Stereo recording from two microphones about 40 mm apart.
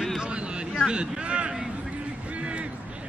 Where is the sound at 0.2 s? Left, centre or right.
Right.